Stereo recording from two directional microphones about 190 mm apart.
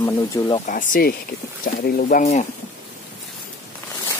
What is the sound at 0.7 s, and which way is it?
Speech, 45° left (ahead or behind).